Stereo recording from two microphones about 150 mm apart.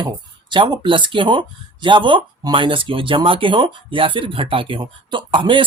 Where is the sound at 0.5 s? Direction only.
30° right (ahead or behind).